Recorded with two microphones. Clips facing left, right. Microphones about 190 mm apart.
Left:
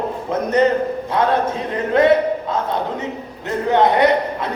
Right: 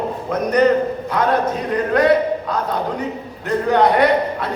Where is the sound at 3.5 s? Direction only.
20° left (ahead or behind).